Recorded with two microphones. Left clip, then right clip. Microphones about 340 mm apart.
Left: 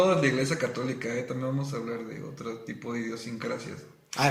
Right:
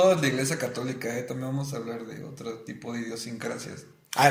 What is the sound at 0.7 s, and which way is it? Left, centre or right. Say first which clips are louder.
Speech: left 1 dB; centre.